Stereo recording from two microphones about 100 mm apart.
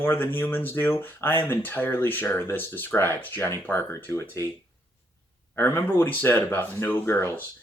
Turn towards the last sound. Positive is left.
turn(degrees=20)  # may be behind; listen again after turning